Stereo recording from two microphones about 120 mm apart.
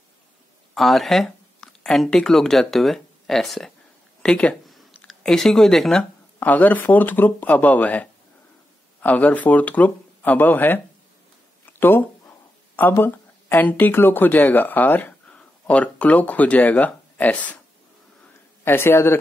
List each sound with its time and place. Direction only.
0.7 s speech: centre (ahead or behind)
4.2 s a sound: 10° left (ahead or behind)
5.0 s speech: 5° left (ahead or behind)
11.8 s speech: 15° left (ahead or behind)
18.6 s a man's voice: 20° left (ahead or behind)